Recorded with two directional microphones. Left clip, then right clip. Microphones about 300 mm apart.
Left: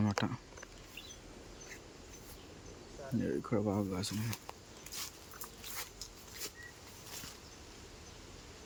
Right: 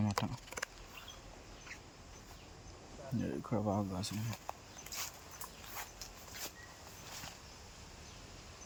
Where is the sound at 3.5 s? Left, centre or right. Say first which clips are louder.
Right 1 dB; centre.